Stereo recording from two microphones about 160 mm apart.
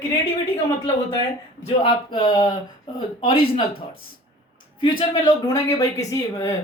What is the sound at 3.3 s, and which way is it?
Speech, 70° left (ahead or behind).